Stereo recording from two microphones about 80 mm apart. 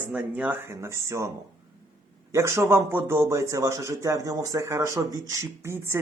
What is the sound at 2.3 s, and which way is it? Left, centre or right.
Speech, right.